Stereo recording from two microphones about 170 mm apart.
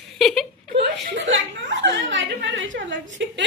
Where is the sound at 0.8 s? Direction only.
90° right.